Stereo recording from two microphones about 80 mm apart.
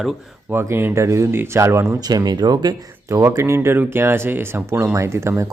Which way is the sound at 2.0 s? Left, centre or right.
Right.